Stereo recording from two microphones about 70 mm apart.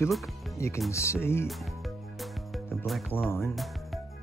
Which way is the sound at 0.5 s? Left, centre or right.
Left.